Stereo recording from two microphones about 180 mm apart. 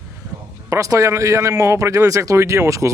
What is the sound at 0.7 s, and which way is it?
A man's voice, 15° right (ahead or behind).